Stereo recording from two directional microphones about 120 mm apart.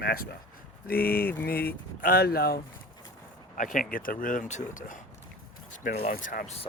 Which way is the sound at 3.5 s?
90° left.